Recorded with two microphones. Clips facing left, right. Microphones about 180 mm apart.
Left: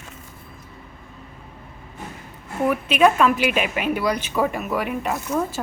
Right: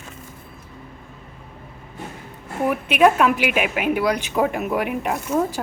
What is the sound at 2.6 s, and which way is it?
A woman's voice, 15° right (ahead or behind).